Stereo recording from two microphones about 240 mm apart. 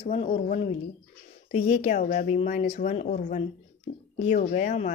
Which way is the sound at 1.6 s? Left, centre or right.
Left.